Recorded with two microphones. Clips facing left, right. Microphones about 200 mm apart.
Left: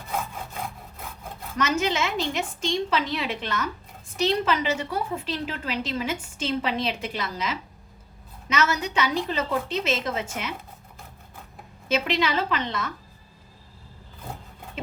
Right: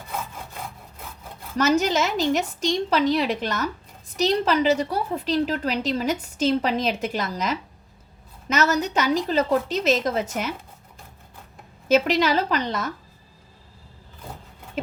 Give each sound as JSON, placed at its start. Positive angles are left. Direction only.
{"t": 1.5, "sound": "a woman's voice", "side_deg": -40}
{"t": 11.9, "sound": "a woman's voice", "side_deg": -40}